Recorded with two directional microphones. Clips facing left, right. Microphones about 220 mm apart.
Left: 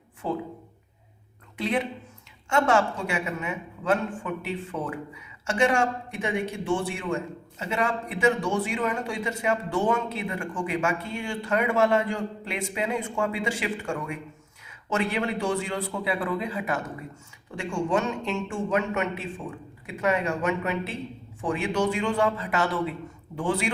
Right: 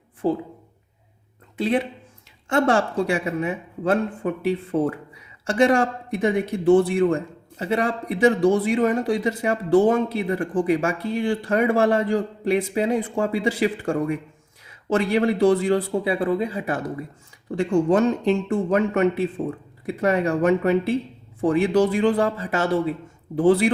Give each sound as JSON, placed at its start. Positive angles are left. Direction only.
{"t": 0.2, "sound": "a man's voice", "side_deg": -35}
{"t": 1.5, "sound": "a man's voice", "side_deg": -30}